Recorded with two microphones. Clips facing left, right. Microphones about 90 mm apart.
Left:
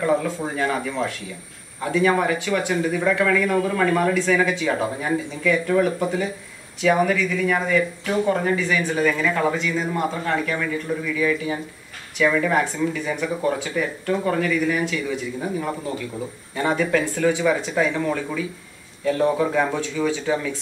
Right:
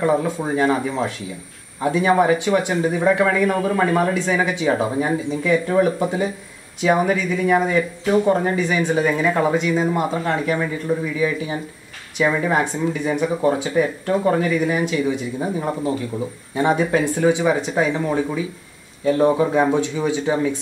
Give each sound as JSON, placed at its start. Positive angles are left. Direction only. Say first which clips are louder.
{"t": 0.0, "sound": "speech", "louder": "right 2 dB", "side_deg": -25}
{"t": 16.5, "sound": "speech", "louder": "right 3 dB", "side_deg": -20}